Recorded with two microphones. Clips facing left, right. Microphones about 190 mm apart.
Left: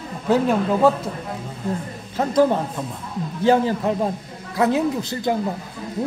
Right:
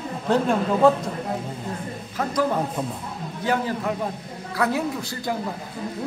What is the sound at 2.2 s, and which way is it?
A man's voice, 30° left (ahead or behind).